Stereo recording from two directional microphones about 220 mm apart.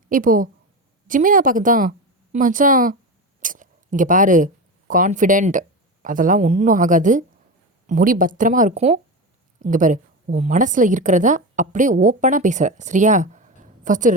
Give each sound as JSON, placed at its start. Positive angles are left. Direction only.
{"t": 0.1, "sound": "a woman's voice", "side_deg": -40}